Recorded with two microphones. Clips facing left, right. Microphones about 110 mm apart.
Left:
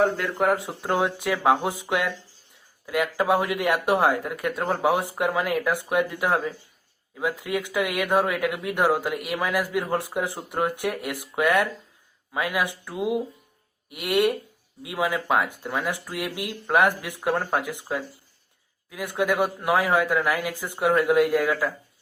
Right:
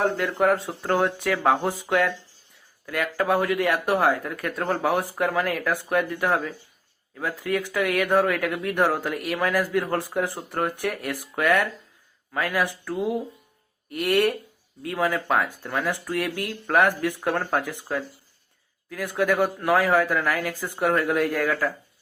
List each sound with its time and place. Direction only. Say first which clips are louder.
0.0 s speech: even; centre (ahead or behind)
0.5 s speech: right 1 dB; 10° left (ahead or behind)